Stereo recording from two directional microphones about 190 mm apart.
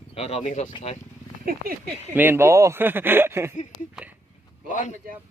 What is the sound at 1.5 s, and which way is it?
Speech, 50° right (ahead or behind).